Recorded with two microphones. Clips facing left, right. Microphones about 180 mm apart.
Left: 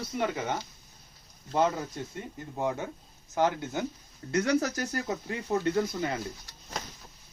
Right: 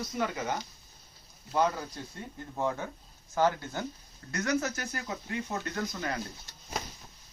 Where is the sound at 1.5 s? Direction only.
25° left (ahead or behind).